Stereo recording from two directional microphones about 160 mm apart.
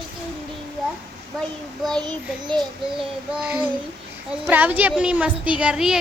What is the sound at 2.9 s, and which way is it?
Child singing, 5° right (ahead or behind).